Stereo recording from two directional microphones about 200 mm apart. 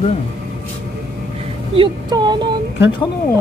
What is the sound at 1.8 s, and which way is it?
Speech, 20° right (ahead or behind).